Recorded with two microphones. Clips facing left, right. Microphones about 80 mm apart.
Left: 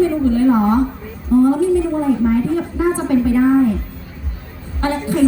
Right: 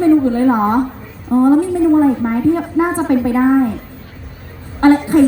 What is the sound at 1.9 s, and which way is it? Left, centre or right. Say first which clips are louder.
A woman's voice: right 3 dB; right.